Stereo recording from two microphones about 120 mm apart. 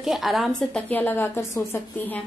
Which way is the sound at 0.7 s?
15° left (ahead or behind).